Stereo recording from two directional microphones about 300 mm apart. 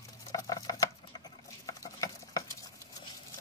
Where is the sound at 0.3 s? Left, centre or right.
Centre.